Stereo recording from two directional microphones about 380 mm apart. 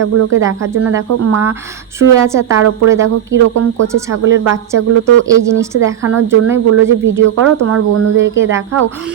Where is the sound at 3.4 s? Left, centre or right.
Right.